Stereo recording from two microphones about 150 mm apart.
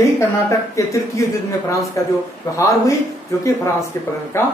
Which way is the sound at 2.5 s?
20° left (ahead or behind).